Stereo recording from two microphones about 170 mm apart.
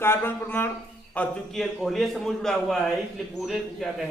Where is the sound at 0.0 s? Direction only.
15° left (ahead or behind).